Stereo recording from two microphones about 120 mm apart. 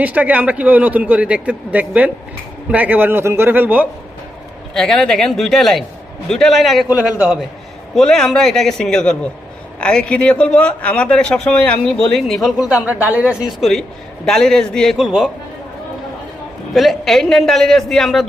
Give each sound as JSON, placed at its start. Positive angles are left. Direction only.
{"t": 0.0, "sound": "a man's voice", "side_deg": -10}
{"t": 4.7, "sound": "a man's voice", "side_deg": 5}
{"t": 12.7, "sound": "a man's voice", "side_deg": -10}
{"t": 13.6, "sound": "a man's voice", "side_deg": 0}
{"t": 16.7, "sound": "a man's voice", "side_deg": 0}